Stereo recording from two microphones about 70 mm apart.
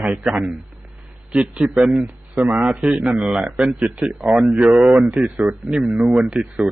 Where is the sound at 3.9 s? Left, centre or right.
Centre.